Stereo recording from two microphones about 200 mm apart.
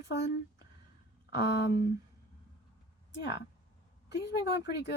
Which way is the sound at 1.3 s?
55° left (ahead or behind).